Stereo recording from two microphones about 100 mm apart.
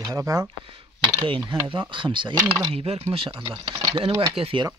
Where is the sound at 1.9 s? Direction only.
55° right (ahead or behind).